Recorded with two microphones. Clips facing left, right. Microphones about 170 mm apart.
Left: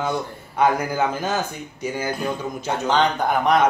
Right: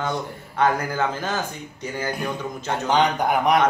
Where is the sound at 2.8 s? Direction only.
15° right (ahead or behind).